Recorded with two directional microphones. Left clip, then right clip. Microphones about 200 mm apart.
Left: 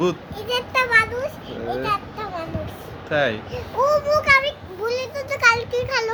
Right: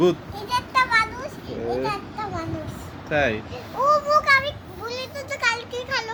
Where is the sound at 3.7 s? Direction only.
30° left (ahead or behind).